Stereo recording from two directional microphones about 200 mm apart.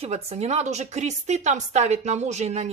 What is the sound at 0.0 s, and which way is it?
A woman's voice, 30° right (ahead or behind).